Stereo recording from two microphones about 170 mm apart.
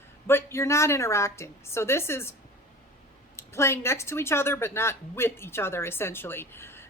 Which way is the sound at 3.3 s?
15° left (ahead or behind).